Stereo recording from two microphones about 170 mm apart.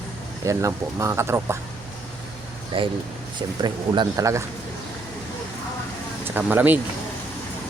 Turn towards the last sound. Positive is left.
turn(degrees=-10)  # may be behind; listen again after turning